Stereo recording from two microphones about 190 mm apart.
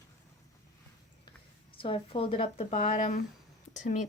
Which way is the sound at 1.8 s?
30° left (ahead or behind).